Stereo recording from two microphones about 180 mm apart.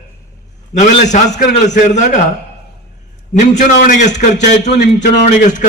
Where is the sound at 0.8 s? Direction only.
40° left (ahead or behind).